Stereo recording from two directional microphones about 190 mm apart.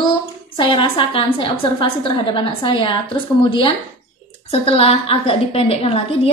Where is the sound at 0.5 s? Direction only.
25° left (ahead or behind).